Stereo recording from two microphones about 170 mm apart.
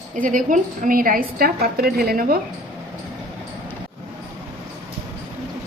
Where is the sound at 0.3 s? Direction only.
50° right (ahead or behind).